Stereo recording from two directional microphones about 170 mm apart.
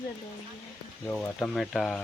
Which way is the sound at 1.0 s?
5° left (ahead or behind).